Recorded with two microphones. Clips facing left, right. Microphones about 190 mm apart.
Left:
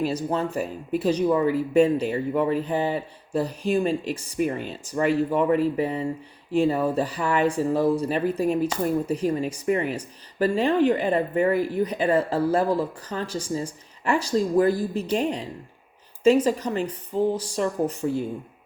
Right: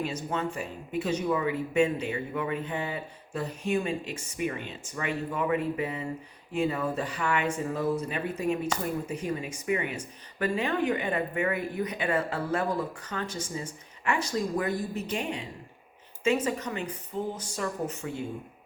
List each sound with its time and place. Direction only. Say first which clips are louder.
0.0 s speech: left 6 dB; 35° left (ahead or behind)